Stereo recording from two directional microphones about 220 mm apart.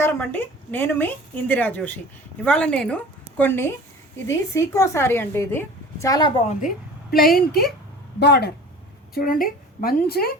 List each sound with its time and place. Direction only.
0.0 s a woman's voice: 10° left (ahead or behind)
7.1 s speech: 40° left (ahead or behind)